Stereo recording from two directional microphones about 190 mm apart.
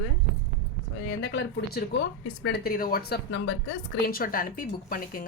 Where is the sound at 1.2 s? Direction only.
60° left (ahead or behind).